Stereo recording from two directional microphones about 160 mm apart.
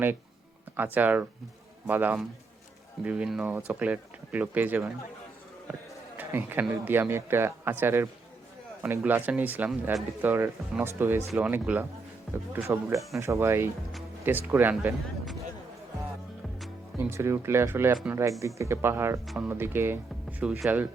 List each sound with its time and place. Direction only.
0.8 s speech: 10° right (ahead or behind)
6.1 s speech: 10° right (ahead or behind)
17.0 s speech: 15° right (ahead or behind)
19.2 s speech: centre (ahead or behind)
19.5 s speech: 15° right (ahead or behind)